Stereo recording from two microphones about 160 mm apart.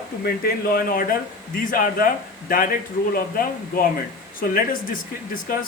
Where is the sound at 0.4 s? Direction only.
70° left (ahead or behind).